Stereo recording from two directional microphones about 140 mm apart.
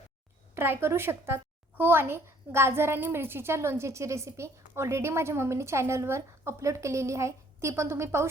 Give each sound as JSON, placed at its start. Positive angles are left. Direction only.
{"t": 0.5, "sound": "a woman's voice", "side_deg": -15}